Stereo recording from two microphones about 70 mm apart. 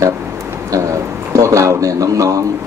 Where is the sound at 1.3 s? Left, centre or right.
Right.